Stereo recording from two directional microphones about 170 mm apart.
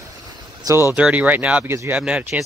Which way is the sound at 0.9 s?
10° right (ahead or behind).